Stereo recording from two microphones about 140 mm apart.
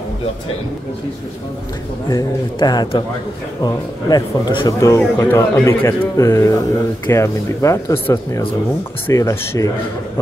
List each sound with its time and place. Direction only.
2.0 s a man's voice: 30° left (ahead or behind)
4.7 s a man's voice: 20° left (ahead or behind)